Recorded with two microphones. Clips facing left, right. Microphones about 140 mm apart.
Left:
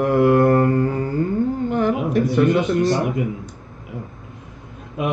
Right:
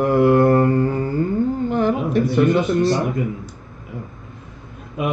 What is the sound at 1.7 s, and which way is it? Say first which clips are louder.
Speech: right 1 dB; 30° right (ahead or behind).